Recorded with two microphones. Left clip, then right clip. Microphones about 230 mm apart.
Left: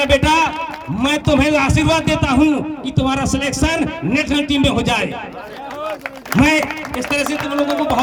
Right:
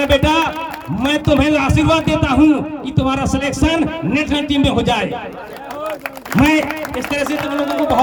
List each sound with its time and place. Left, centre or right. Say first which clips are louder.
0.0 s a man's voice: even; left
6.4 s a man's voice: right 1 dB; left